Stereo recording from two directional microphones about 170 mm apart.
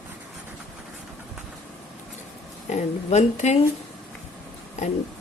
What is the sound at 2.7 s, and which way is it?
Speech, 45° left (ahead or behind).